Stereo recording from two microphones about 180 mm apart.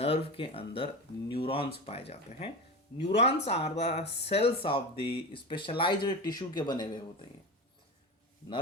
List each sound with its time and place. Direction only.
0.0 s speech: 35° left (ahead or behind)